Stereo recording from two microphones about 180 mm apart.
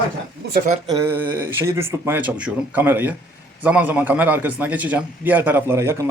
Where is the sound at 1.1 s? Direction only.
10° right (ahead or behind).